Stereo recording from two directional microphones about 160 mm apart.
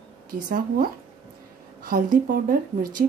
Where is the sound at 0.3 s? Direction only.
65° right (ahead or behind).